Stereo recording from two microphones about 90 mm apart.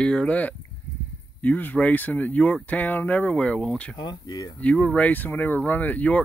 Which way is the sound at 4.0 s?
45° left (ahead or behind).